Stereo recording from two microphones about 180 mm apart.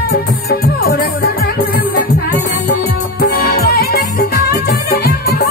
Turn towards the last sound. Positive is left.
turn(degrees=60)  # may be behind; listen again after turning